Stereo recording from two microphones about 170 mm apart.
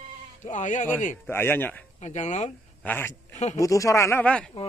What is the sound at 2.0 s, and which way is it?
Speech, 45° left (ahead or behind).